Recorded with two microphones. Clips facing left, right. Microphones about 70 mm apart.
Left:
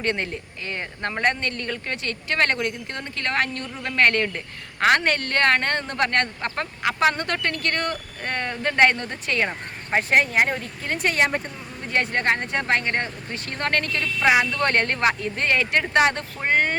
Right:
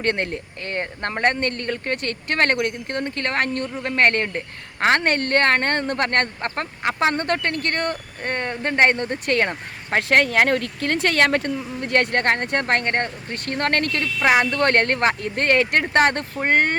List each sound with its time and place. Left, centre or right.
0.0 s speech: right
9.2 s speech: right
9.9 s speech: right
14.0 s speech: centre
14.5 s speech: right